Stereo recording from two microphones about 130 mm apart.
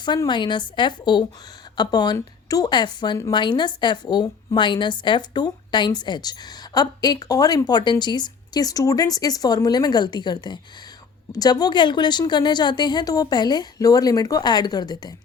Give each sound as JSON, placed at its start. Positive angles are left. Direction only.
{"t": 0.0, "sound": "a woman's voice", "side_deg": 35}